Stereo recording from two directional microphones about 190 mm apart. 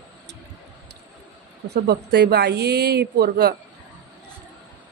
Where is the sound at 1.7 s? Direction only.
60° right (ahead or behind).